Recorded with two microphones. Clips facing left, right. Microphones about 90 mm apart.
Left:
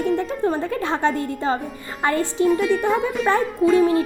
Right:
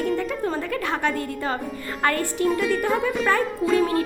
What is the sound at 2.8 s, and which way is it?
Music, 5° left (ahead or behind).